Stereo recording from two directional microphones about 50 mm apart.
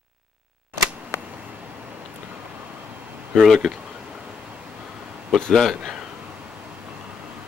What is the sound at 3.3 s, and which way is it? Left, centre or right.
Speech, centre.